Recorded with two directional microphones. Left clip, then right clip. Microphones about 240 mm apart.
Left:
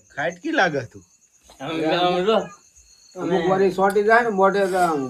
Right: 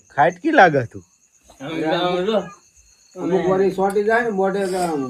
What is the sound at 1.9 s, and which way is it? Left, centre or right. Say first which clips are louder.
Speech: left 1 dB; centre.